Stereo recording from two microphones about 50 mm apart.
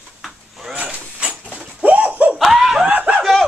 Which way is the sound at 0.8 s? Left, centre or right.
Right.